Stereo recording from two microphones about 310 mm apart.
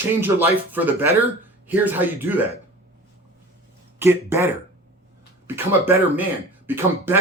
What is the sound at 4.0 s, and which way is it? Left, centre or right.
Speech, centre.